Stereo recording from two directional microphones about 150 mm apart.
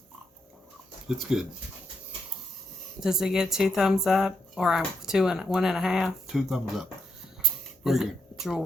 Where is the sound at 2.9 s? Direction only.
5° right (ahead or behind).